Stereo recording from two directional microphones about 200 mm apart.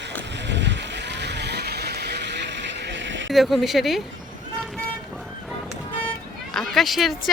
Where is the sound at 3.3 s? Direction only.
Centre (ahead or behind).